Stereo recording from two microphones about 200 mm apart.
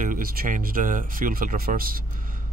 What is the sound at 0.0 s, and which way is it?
Speech, 45° right (ahead or behind).